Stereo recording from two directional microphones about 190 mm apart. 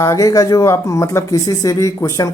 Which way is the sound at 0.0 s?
15° left (ahead or behind).